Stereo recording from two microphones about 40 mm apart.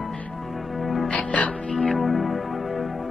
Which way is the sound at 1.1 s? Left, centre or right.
Left.